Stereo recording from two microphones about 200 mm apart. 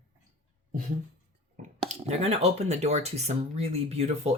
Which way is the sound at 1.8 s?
30° right (ahead or behind).